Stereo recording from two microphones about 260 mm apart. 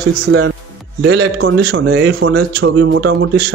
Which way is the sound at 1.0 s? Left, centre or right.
Right.